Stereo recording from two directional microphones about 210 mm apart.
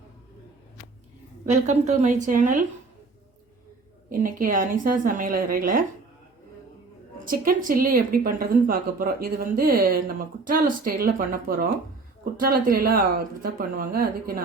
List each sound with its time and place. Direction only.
1.5 s a woman's voice: 35° right (ahead or behind)
4.1 s a woman's voice: 40° right (ahead or behind)
7.3 s speech: 40° right (ahead or behind)